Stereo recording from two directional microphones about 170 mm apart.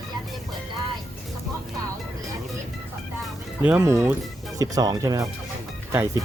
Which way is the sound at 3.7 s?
15° right (ahead or behind).